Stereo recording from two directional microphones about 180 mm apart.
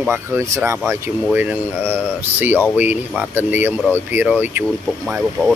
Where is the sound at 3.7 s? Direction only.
10° left (ahead or behind).